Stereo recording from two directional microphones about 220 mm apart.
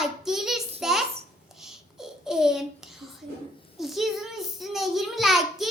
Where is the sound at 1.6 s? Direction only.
Centre (ahead or behind).